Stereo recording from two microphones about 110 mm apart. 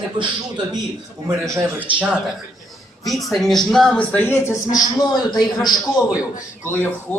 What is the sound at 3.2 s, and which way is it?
Speech, centre (ahead or behind).